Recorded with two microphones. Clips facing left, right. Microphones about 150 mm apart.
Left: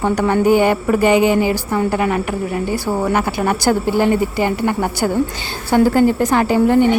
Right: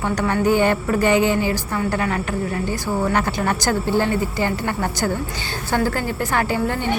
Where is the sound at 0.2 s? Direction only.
10° left (ahead or behind).